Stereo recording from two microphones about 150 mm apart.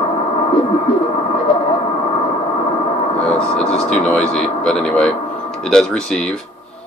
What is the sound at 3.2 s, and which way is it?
Vehicle, 5° left (ahead or behind).